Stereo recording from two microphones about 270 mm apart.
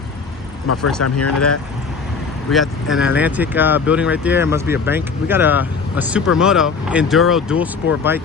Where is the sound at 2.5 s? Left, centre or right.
Centre.